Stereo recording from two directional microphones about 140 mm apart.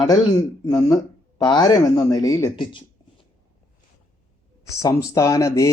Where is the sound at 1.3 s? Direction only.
35° left (ahead or behind).